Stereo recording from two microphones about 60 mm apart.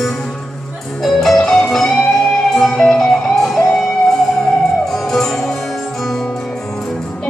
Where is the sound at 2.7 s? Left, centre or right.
Centre.